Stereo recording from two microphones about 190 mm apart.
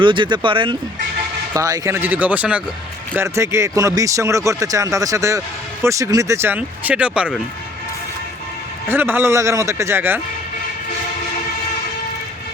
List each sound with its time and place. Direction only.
0.0 s speech: 25° right (ahead or behind); by 7.3 s 5° right (ahead or behind)
8.9 s speech: 10° right (ahead or behind)